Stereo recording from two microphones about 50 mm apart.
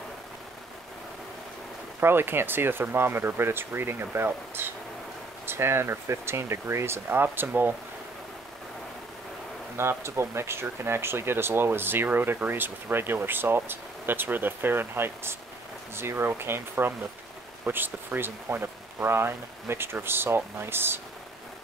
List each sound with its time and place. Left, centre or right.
2.0 s speech: right
7.1 s speech: right
9.8 s speech: right